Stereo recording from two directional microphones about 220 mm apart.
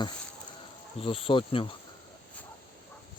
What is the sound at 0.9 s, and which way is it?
Speech, 25° left (ahead or behind).